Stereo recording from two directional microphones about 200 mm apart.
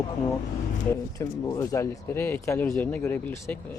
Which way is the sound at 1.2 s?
15° left (ahead or behind).